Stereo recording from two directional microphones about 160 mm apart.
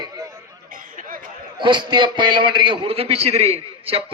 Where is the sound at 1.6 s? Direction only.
30° right (ahead or behind).